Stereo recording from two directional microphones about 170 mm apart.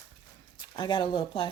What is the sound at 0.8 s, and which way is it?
Speech, 30° left (ahead or behind).